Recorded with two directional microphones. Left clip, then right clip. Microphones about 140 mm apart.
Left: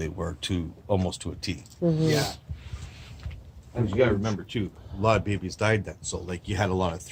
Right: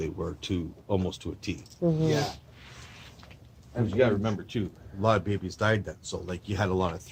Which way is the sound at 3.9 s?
Centre (ahead or behind).